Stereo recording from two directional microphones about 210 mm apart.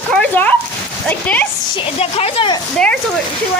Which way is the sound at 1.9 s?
30° left (ahead or behind).